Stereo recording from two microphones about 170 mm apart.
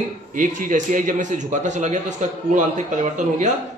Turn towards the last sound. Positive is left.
turn(degrees=-45)  # may be behind; listen again after turning